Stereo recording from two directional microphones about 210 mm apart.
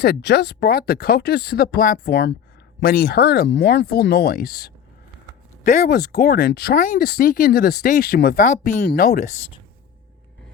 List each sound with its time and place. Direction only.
0.0 s speech: 55° left (ahead or behind)